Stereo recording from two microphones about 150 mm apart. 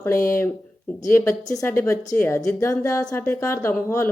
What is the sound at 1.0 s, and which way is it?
Speech, 20° left (ahead or behind).